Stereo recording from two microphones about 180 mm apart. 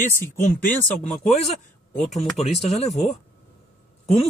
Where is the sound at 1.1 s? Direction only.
40° left (ahead or behind).